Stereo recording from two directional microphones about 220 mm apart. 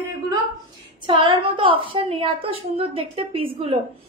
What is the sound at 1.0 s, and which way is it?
A woman's voice, 20° right (ahead or behind).